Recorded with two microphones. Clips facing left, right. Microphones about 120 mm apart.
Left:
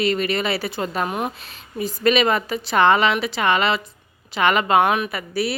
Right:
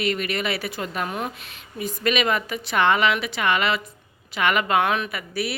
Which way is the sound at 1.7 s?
35° left (ahead or behind).